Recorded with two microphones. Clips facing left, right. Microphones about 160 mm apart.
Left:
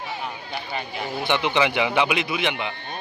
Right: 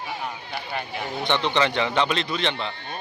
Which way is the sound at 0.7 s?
10° left (ahead or behind).